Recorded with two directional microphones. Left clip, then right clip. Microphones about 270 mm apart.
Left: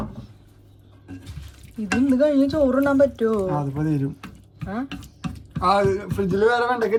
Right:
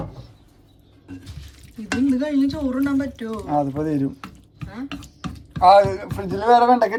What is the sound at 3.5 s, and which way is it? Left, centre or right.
Speech, right.